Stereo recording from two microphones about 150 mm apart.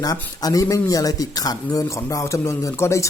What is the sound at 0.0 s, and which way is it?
Speech, 25° left (ahead or behind).